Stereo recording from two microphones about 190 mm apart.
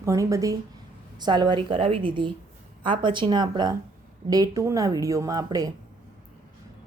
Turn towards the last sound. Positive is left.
turn(degrees=-20)  # may be behind; listen again after turning